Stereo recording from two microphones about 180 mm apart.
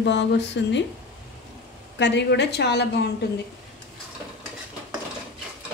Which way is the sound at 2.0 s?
70° left (ahead or behind).